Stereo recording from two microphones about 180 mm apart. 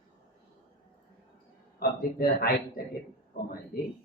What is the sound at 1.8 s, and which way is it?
A man's voice, 55° left (ahead or behind).